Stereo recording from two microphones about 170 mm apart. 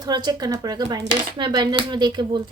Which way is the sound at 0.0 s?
25° right (ahead or behind).